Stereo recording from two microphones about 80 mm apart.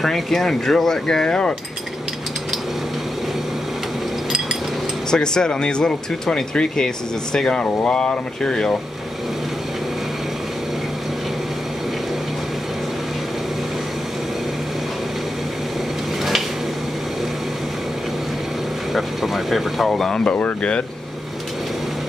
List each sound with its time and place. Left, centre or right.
0.0 s speech: centre
5.1 s speech: centre
18.9 s speech: centre